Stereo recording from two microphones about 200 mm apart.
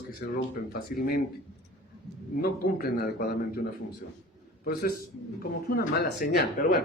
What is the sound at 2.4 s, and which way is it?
Speech, 45° left (ahead or behind).